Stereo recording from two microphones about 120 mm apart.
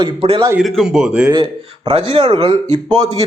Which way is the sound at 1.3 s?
40° right (ahead or behind).